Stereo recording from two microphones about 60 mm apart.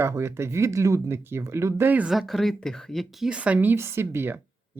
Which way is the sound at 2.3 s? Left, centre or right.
Centre.